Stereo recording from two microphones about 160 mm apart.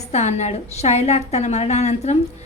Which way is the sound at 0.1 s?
45° left (ahead or behind).